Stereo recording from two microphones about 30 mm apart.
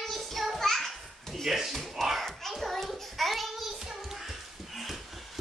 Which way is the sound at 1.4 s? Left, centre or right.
Centre.